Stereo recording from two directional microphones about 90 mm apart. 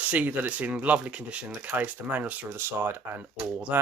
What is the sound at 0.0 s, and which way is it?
Speech, 20° right (ahead or behind).